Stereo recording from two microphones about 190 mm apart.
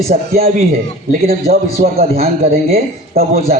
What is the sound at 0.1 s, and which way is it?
Speech, 50° right (ahead or behind).